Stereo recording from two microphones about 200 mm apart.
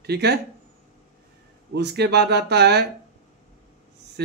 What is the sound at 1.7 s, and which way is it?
Speech, 60° right (ahead or behind).